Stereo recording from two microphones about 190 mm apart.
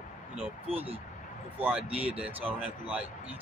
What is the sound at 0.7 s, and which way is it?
Speech, 30° right (ahead or behind).